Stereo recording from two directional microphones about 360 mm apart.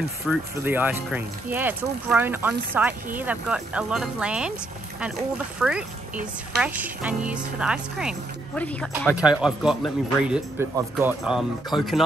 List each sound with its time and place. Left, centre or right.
0.3 s speech: centre
5.6 s speech: centre